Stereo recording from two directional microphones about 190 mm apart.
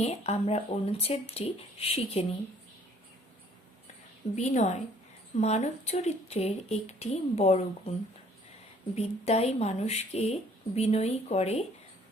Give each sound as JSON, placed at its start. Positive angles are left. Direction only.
{"t": 0.0, "sound": "speech", "side_deg": 35}
{"t": 4.4, "sound": "speech", "side_deg": 35}
{"t": 9.0, "sound": "speech", "side_deg": 35}